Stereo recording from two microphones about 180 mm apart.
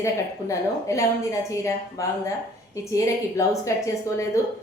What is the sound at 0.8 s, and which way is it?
A woman's voice, 15° left (ahead or behind).